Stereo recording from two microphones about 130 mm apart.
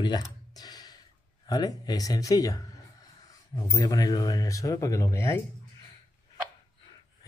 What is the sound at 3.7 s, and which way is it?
Speech, 25° left (ahead or behind).